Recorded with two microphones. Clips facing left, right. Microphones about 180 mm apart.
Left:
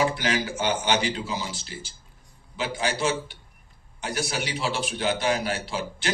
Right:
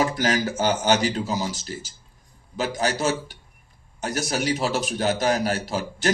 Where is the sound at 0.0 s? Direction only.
40° right (ahead or behind).